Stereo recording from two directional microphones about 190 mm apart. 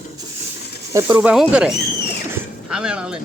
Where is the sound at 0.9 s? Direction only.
10° right (ahead or behind).